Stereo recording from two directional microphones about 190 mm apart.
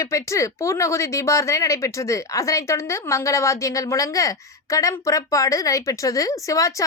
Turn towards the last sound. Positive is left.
turn(degrees=15)  # may be behind; listen again after turning